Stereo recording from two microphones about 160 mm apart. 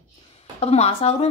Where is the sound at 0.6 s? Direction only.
40° left (ahead or behind).